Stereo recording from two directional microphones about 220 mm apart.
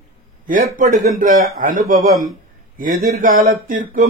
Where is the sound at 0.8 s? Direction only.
35° right (ahead or behind).